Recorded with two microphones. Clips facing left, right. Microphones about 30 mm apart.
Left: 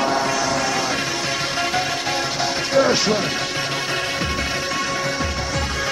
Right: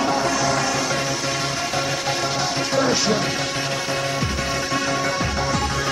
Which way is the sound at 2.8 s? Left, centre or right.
Centre.